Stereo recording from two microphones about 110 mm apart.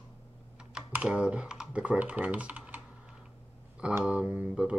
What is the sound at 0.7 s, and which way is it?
Speech, 10° right (ahead or behind).